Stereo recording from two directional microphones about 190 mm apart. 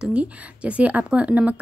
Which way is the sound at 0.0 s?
5° right (ahead or behind).